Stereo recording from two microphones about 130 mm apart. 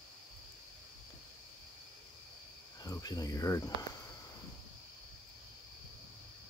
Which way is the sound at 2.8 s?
30° left (ahead or behind).